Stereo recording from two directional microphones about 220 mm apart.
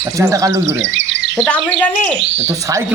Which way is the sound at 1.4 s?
5° left (ahead or behind).